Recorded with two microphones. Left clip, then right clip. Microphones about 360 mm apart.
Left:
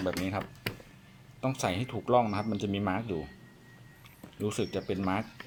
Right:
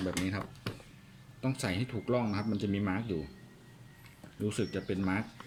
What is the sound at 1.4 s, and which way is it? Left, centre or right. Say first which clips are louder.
Speech: left 4 dB; centre.